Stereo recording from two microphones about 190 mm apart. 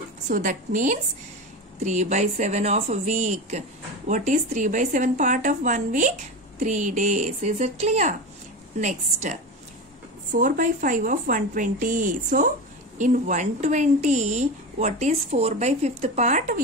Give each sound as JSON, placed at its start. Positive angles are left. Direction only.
{"t": 0.3, "sound": "speech", "side_deg": -45}